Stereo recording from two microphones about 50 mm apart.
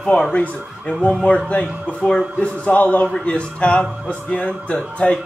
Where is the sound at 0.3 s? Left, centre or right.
Left.